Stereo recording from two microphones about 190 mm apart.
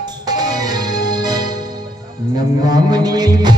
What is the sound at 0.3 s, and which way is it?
Music, 20° right (ahead or behind).